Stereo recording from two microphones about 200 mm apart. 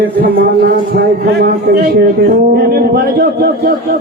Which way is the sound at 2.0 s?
50° right (ahead or behind).